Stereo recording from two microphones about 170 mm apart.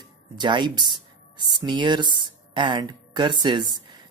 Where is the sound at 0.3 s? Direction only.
25° right (ahead or behind).